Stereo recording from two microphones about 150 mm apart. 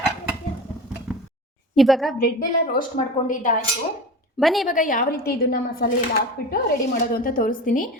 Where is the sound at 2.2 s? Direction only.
75° left (ahead or behind).